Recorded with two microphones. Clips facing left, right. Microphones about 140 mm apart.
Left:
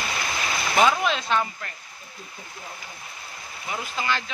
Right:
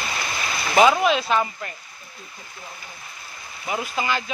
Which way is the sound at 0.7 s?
10° right (ahead or behind).